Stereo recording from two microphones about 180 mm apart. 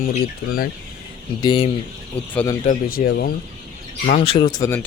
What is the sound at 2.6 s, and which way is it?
Speech, 60° left (ahead or behind).